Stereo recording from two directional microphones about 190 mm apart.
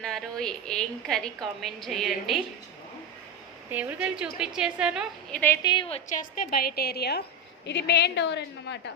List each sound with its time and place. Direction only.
0.0 s a woman's voice: centre (ahead or behind)
3.7 s a woman's voice: 10° right (ahead or behind)
5.6 s a woman's voice: 25° left (ahead or behind)
6.1 s a woman's voice: 45° left (ahead or behind); by 8.8 s 65° left (ahead or behind)